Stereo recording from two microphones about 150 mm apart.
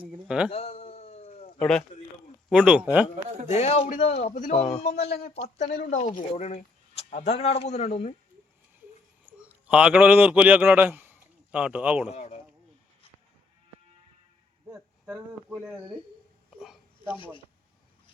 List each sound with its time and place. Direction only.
0.3 s speech: 5° right (ahead or behind)
0.5 s cat: 45° left (ahead or behind)
1.5 s speech: 5° left (ahead or behind)
2.5 s speech: 5° right (ahead or behind)
3.5 s speech: 45° left (ahead or behind)
9.2 s speech: 10° right (ahead or behind)
12.1 s speech: 45° left (ahead or behind)
15.0 s speech: 10° right (ahead or behind)
16.6 s a sound: 5° right (ahead or behind)
17.2 s speech: 35° left (ahead or behind)